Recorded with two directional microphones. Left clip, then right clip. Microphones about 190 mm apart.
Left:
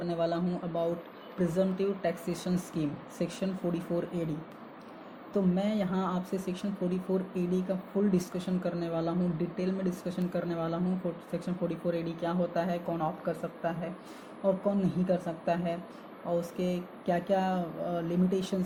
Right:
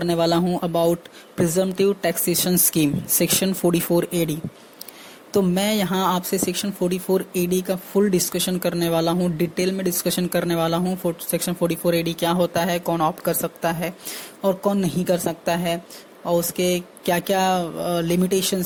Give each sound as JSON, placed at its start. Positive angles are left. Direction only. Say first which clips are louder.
{"t": 0.0, "sound": "speech", "louder": "right 11 dB", "side_deg": -55}